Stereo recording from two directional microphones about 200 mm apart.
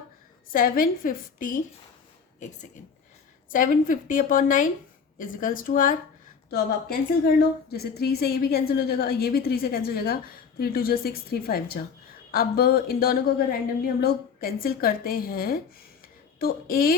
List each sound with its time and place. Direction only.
0.5 s a woman's voice: 45° left (ahead or behind)
7.7 s a woman's voice: 50° left (ahead or behind)